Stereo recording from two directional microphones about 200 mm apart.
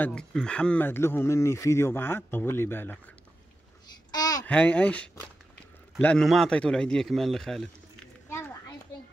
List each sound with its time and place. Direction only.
0.0 s speech: 5° left (ahead or behind)
4.1 s babbling: 20° left (ahead or behind)
4.5 s a man's voice: 5° left (ahead or behind)